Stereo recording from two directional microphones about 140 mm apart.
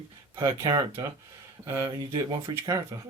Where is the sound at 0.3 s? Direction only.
30° right (ahead or behind).